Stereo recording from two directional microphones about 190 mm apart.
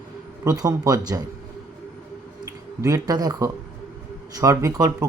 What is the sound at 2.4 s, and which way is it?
Speech, 20° right (ahead or behind).